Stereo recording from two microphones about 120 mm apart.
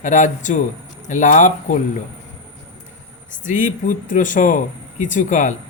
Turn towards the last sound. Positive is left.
turn(degrees=90)